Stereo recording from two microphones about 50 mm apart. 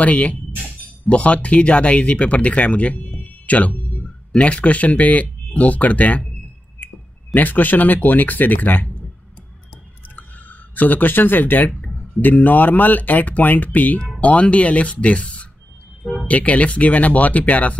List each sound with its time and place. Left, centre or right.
0.0 s speech: left
7.3 s speech: left
10.1 s speech: left